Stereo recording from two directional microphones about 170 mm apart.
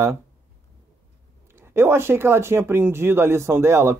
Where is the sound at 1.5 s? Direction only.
15° right (ahead or behind).